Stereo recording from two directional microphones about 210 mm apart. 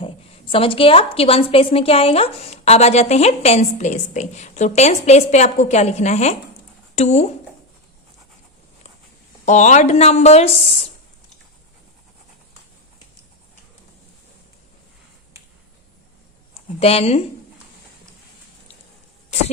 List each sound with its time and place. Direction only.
0.0 s a woman's voice: 25° left (ahead or behind)
9.5 s a woman's voice: 35° left (ahead or behind)
16.6 s speech: 30° left (ahead or behind)